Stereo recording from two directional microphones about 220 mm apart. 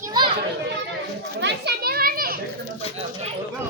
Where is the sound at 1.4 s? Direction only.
50° right (ahead or behind).